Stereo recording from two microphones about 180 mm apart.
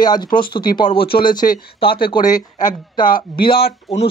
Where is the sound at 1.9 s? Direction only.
25° left (ahead or behind).